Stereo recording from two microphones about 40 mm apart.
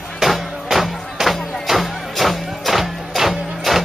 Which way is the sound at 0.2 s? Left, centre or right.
Centre.